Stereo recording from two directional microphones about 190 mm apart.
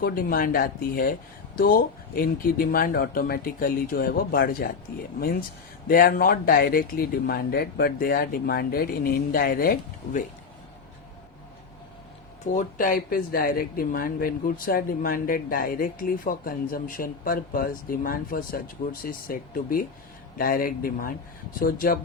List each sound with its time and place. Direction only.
0.0 s speech: 50° left (ahead or behind)
12.5 s speech: 45° left (ahead or behind)